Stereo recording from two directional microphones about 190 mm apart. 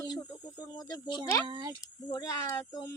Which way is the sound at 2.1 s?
20° left (ahead or behind).